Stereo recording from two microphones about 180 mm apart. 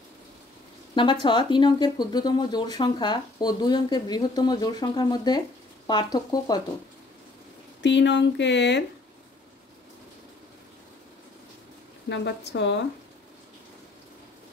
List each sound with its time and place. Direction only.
1.2 s speech: 25° left (ahead or behind)
7.8 s speech: 80° left
12.1 s speech: 75° left (ahead or behind)